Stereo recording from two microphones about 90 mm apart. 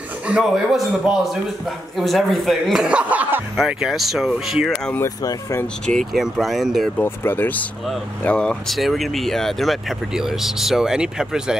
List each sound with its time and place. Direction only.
0.3 s speech: 5° right (ahead or behind)
3.6 s speech: 5° right (ahead or behind)
5.0 s speech: 45° left (ahead or behind)
5.9 s speech: 5° left (ahead or behind)
7.0 s speech: 20° left (ahead or behind)
8.7 s speech: centre (ahead or behind)